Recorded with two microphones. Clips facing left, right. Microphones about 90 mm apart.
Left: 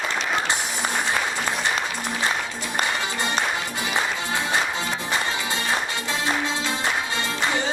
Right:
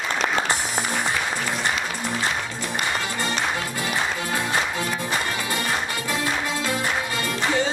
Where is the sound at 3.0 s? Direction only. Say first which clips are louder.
Left 1 dB; 20° left (ahead or behind).